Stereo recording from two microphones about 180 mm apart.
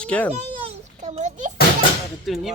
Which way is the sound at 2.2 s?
Centre (ahead or behind).